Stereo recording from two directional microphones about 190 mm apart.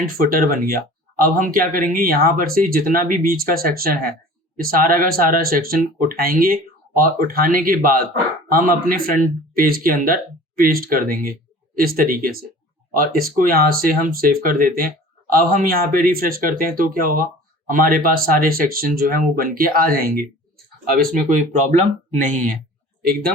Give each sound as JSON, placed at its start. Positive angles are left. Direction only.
{"t": 0.2, "sound": "speech", "side_deg": -50}